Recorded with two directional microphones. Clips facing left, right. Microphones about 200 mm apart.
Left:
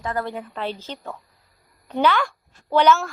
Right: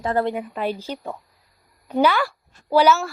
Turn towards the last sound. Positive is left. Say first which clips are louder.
# right 1 dB
turn(degrees=-5)  # may be behind; listen again after turning